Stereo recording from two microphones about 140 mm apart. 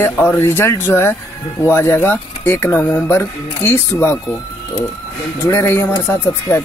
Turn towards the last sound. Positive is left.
turn(degrees=20)  # may be behind; listen again after turning